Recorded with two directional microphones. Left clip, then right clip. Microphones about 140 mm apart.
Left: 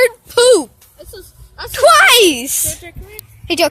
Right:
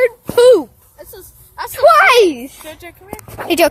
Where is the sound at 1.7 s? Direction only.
20° left (ahead or behind).